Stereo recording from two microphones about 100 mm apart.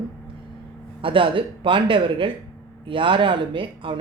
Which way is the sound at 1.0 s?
60° right (ahead or behind).